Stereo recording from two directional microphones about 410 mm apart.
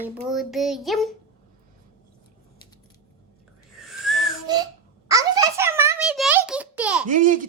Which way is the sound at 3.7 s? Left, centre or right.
Centre.